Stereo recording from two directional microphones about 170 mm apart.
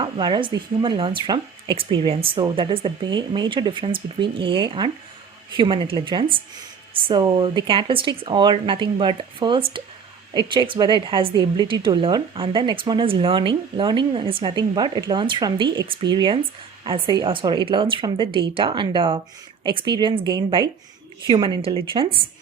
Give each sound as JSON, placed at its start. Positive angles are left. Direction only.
{"t": 0.0, "sound": "a woman's voice", "side_deg": -25}